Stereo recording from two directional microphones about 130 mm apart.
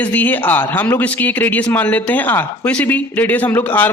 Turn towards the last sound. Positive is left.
turn(degrees=15)  # may be behind; listen again after turning